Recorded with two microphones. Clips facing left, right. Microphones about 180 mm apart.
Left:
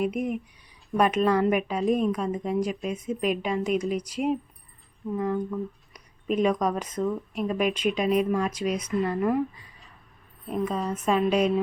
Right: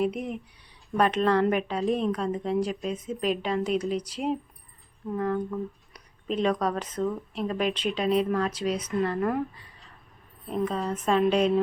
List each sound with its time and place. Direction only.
0.0 s a woman's voice: 10° left (ahead or behind)
10.5 s a woman's voice: 10° left (ahead or behind)